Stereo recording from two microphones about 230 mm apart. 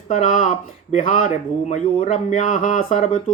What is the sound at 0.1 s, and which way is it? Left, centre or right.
Speech, left.